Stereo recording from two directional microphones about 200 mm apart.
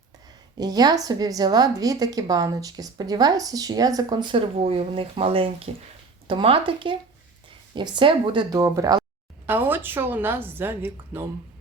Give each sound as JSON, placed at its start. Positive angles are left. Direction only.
{"t": 0.6, "sound": "a woman's voice", "side_deg": -20}